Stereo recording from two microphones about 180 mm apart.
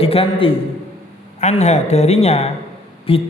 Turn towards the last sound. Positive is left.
turn(degrees=30)  # may be behind; listen again after turning